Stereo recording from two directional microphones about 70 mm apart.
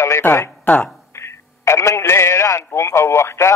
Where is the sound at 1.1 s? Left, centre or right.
Left.